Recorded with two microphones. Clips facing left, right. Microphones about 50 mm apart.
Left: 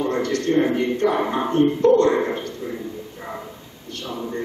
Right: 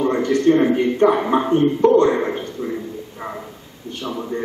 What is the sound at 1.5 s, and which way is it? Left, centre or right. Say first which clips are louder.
Speech: even; right.